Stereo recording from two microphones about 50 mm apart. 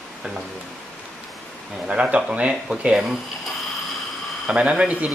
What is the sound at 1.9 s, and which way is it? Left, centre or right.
Speech, centre.